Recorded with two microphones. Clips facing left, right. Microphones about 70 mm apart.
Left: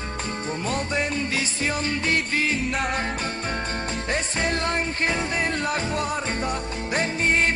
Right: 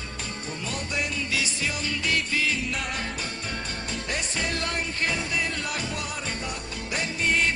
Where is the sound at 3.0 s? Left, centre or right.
Left.